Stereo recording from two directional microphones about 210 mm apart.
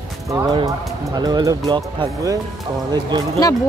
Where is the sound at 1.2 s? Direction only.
20° right (ahead or behind).